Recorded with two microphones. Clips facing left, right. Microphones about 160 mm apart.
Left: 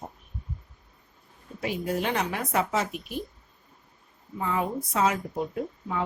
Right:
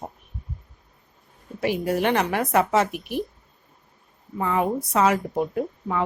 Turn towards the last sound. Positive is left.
turn(degrees=-65)  # may be behind; listen again after turning